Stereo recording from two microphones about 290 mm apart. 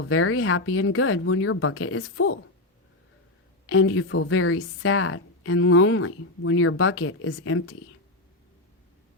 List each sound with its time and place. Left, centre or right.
0.0 s a woman's voice: left
3.7 s a woman's voice: left